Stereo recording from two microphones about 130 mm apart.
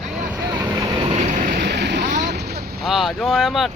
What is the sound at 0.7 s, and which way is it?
Vehicle, 30° right (ahead or behind).